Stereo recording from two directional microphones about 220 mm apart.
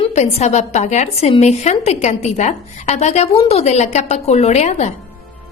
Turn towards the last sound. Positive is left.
turn(degrees=30)  # may be behind; listen again after turning